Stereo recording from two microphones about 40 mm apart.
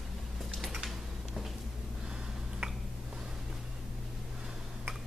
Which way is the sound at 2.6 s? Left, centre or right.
Right.